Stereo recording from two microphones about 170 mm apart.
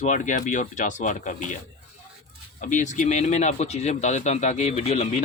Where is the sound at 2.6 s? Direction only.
45° left (ahead or behind).